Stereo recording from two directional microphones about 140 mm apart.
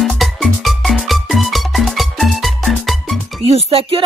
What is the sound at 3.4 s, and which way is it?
Speech, 45° right (ahead or behind).